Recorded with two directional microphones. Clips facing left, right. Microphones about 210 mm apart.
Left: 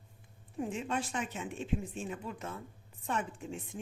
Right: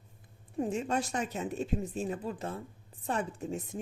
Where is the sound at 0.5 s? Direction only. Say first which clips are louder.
Right 4 dB; 40° right (ahead or behind).